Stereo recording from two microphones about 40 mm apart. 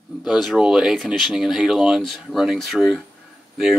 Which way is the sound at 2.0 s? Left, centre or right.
Centre.